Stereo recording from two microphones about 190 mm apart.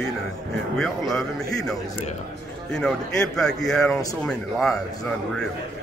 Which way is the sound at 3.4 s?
Centre (ahead or behind).